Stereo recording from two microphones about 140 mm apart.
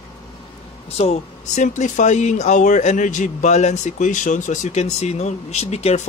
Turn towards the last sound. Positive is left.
turn(degrees=50)  # may be behind; listen again after turning